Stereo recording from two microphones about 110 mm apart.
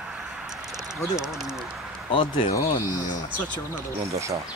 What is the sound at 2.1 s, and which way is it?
Speech, 50° left (ahead or behind).